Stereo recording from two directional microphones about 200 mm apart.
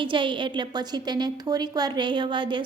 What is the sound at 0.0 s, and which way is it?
A woman's voice, 25° right (ahead or behind).